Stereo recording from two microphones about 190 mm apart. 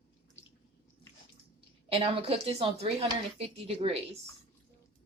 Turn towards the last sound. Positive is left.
turn(degrees=-30)  # may be behind; listen again after turning